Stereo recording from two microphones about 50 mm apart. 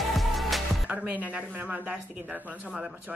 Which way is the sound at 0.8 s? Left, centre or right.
Right.